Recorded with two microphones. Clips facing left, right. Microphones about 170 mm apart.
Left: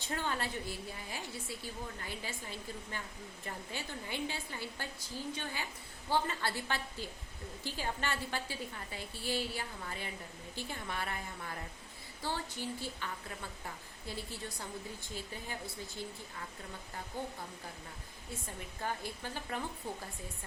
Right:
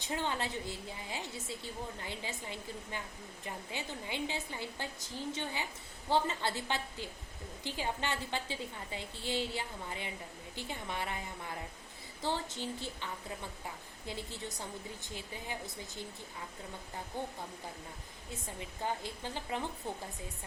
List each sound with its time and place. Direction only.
0.0 s a woman's voice: 15° right (ahead or behind)
14.1 s a woman's voice: 20° right (ahead or behind)
18.8 s a woman's voice: 20° right (ahead or behind)